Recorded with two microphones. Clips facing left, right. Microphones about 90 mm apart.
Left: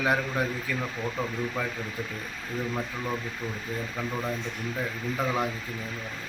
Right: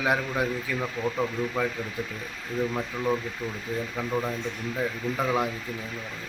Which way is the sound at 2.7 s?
10° right (ahead or behind).